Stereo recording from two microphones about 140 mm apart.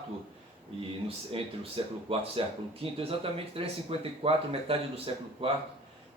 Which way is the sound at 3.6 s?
40° right (ahead or behind).